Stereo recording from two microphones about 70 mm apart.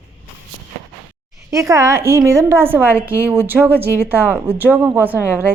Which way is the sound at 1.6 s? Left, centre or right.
Right.